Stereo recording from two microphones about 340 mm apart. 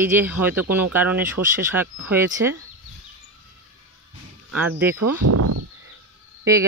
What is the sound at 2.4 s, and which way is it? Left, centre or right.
Speech, right.